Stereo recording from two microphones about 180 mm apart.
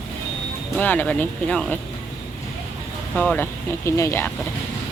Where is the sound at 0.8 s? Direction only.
10° left (ahead or behind).